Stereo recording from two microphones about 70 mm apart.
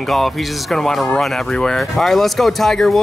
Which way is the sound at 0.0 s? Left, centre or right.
Centre.